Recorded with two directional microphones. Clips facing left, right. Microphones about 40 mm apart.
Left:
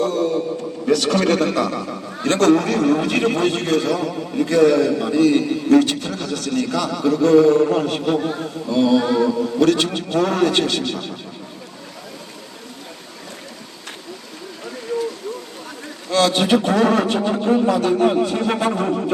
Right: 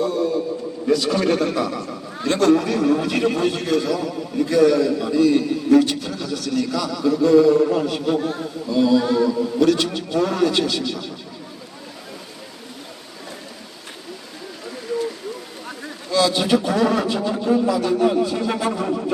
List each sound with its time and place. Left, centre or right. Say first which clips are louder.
0.0 s a man's voice: left 1 dB; left
16.0 s a man's voice: left 2 dB; left